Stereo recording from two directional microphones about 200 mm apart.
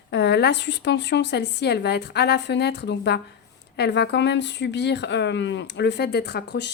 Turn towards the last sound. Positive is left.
turn(degrees=55)  # may be behind; listen again after turning